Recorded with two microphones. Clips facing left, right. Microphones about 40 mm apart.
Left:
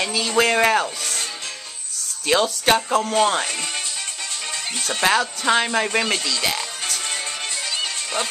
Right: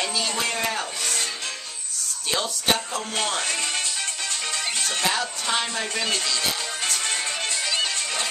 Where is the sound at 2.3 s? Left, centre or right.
Left.